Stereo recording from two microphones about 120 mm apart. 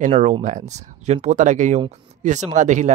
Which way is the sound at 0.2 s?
90° right.